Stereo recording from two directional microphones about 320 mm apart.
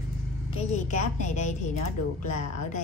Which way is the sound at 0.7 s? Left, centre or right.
Left.